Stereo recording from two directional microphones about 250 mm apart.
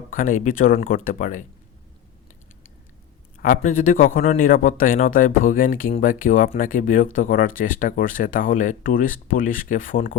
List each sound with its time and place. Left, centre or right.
0.1 s a man's voice: left
3.3 s a man's voice: left